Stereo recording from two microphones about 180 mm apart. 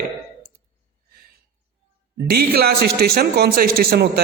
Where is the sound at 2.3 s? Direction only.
60° right (ahead or behind).